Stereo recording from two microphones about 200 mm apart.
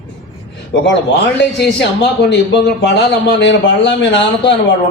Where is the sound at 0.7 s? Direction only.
60° left (ahead or behind).